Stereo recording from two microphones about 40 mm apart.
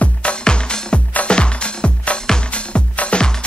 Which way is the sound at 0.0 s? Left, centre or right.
Left.